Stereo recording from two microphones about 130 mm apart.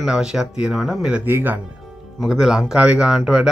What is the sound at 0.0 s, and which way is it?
Speech, 5° right (ahead or behind).